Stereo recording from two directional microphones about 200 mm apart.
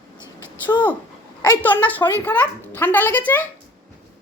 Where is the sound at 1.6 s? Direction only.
10° left (ahead or behind).